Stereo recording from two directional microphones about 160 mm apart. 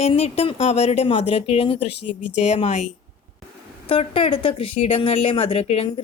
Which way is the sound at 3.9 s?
35° left (ahead or behind).